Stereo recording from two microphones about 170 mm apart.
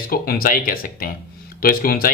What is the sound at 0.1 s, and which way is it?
Speech, 60° left (ahead or behind).